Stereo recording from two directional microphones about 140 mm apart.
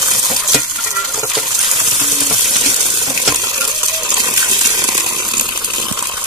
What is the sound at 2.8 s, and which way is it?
Coin, 40° right (ahead or behind).